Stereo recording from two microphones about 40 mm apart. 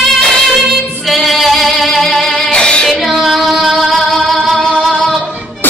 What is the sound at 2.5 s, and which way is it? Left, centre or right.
Music, left.